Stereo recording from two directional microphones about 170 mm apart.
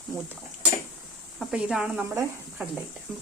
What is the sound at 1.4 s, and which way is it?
Speech, 5° right (ahead or behind).